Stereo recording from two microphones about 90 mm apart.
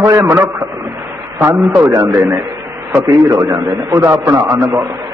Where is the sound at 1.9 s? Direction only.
40° right (ahead or behind).